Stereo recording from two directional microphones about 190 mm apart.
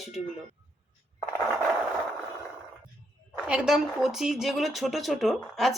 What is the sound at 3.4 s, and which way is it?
Speech, 5° right (ahead or behind).